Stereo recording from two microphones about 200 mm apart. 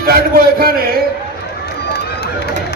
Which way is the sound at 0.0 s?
50° right (ahead or behind).